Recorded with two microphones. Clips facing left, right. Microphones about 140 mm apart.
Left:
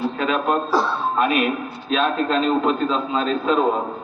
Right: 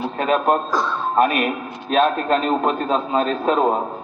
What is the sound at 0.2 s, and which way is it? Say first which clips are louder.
Speech: right 5 dB; 45° right (ahead or behind).